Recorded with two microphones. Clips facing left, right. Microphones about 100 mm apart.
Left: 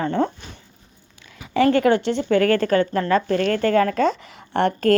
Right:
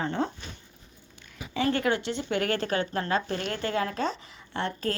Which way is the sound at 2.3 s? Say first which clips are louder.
Left 10 dB; 15° right (ahead or behind).